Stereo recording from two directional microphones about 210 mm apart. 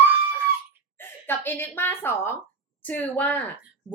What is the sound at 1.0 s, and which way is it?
A woman's voice, 10° left (ahead or behind).